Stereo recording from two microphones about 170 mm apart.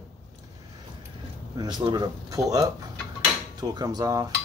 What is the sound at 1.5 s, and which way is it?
Speech, 25° right (ahead or behind).